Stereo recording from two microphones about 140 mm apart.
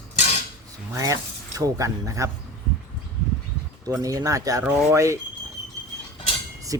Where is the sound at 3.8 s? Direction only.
25° right (ahead or behind).